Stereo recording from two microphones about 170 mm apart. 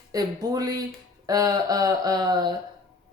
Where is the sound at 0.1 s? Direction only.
20° right (ahead or behind).